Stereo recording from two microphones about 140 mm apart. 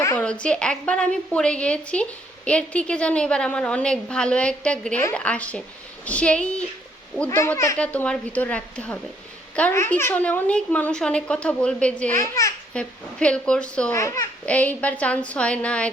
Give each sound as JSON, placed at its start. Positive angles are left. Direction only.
{"t": 0.2, "sound": "a woman's voice", "side_deg": 10}
{"t": 7.3, "sound": "speech", "side_deg": 20}
{"t": 7.8, "sound": "a woman's voice", "side_deg": 5}
{"t": 12.1, "sound": "speech", "side_deg": 20}
{"t": 12.7, "sound": "a woman's voice", "side_deg": 5}
{"t": 13.9, "sound": "speech", "side_deg": 20}
{"t": 14.4, "sound": "a woman's voice", "side_deg": 10}